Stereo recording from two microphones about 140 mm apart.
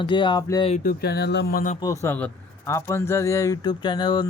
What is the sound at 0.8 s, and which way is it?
Speech, 90° left.